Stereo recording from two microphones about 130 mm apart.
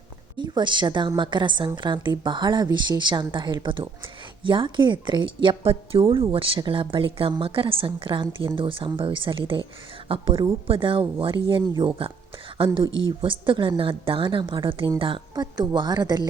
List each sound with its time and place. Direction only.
0.3 s a woman's voice: 35° right (ahead or behind)